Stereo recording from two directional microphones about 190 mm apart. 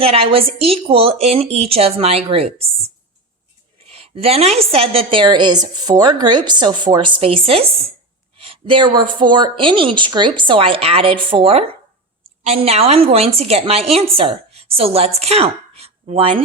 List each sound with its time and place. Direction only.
0.0 s a woman's voice: 30° right (ahead or behind)
3.8 s a woman's voice: 30° right (ahead or behind)